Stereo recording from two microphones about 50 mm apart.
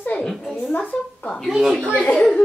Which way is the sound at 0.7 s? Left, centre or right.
Left.